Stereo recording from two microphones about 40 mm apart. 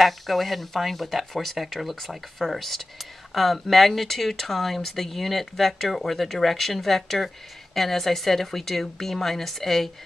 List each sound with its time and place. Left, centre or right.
0.0 s speech: centre